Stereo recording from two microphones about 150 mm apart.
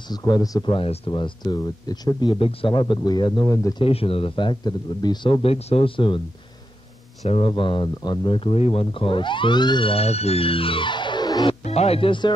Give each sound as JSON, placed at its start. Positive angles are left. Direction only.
{"t": 0.1, "sound": "speech", "side_deg": 25}
{"t": 3.8, "sound": "speech", "side_deg": 40}
{"t": 7.2, "sound": "speech", "side_deg": 35}
{"t": 11.6, "sound": "speech", "side_deg": 45}